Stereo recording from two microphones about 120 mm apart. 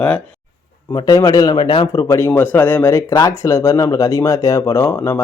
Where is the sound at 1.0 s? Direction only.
30° left (ahead or behind).